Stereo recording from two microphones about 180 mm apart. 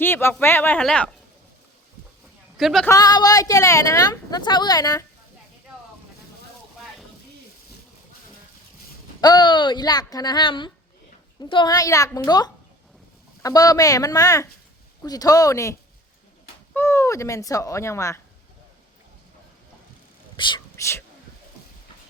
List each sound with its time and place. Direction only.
0.0 s speech: 15° left (ahead or behind)
2.6 s speech: centre (ahead or behind)
2.8 s speech: 20° left (ahead or behind)
9.2 s speech: 25° left (ahead or behind)
20.3 s whispering: 25° left (ahead or behind)